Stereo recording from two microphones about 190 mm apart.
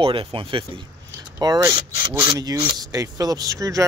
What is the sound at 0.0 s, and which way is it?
Speech, 30° right (ahead or behind).